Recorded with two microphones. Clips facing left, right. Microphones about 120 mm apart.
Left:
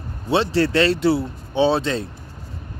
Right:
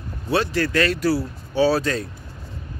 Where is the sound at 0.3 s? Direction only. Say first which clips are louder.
Left 3 dB; 25° left (ahead or behind).